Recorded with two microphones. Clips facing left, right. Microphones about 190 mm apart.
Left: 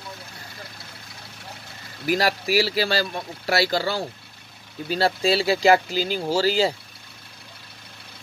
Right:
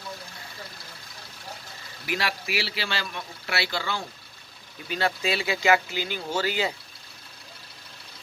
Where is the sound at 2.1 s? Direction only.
40° left (ahead or behind).